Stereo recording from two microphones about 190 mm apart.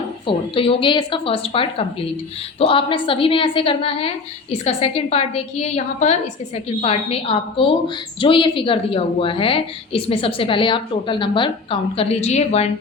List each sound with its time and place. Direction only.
0.3 s a woman's voice: 30° left (ahead or behind)